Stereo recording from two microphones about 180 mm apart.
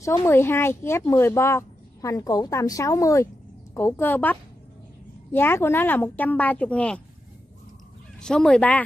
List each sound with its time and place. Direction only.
0.0 s speech: 15° left (ahead or behind)
8.2 s speech: 5° left (ahead or behind)